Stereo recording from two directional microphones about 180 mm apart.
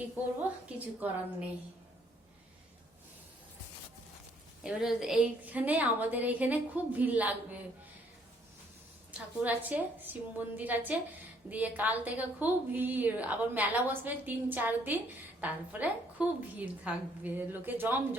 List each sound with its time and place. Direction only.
0.4 s a woman's voice: 10° right (ahead or behind)
4.6 s a woman's voice: 5° right (ahead or behind)
9.1 s a woman's voice: 10° right (ahead or behind)